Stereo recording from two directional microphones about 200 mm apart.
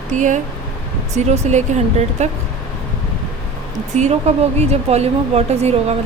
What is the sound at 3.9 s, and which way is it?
Speech, 35° right (ahead or behind).